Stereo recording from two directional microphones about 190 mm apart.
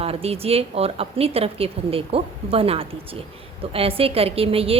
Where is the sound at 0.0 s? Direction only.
30° right (ahead or behind).